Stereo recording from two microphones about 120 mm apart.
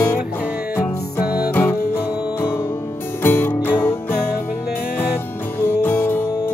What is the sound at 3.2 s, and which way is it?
Music, 20° left (ahead or behind).